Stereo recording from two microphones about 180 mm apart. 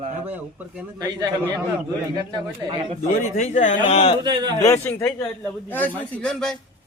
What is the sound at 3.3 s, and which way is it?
Speech, 40° left (ahead or behind).